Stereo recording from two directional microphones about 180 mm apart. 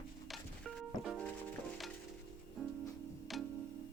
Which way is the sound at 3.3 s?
Centre (ahead or behind).